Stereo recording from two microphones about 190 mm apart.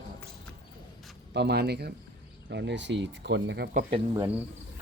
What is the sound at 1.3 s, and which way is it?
Speech, 60° right (ahead or behind).